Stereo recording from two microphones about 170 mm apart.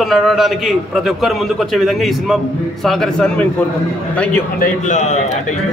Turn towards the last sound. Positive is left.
turn(degrees=45)  # may be behind; listen again after turning